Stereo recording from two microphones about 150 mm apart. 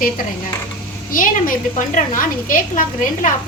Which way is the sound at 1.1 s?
65° left (ahead or behind).